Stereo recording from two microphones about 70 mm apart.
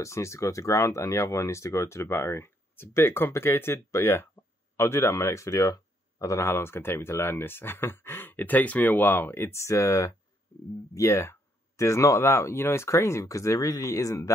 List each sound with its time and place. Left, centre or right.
0.0 s speech: left